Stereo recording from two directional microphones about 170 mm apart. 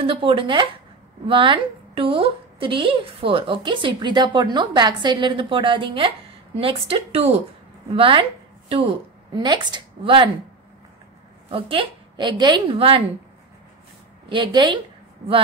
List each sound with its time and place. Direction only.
0.0 s a woman's voice: 30° right (ahead or behind)
11.5 s a woman's voice: 30° right (ahead or behind)
14.3 s speech: 25° right (ahead or behind)